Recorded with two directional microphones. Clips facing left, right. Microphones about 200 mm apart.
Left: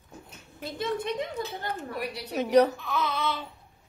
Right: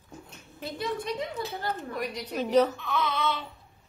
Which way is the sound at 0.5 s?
10° left (ahead or behind).